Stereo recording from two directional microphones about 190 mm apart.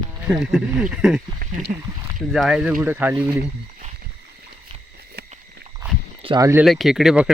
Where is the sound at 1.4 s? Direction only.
50° right (ahead or behind).